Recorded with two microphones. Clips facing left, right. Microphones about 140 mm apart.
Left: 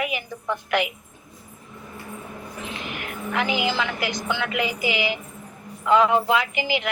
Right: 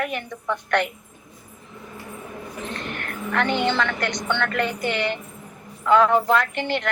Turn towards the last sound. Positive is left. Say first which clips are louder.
# right 1 dB
turn(degrees=5)  # may be behind; listen again after turning